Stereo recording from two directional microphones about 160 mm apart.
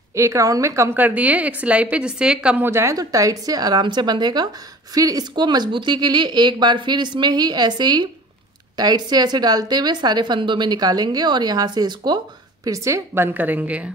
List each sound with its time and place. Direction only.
0.1 s a woman's voice: 20° right (ahead or behind)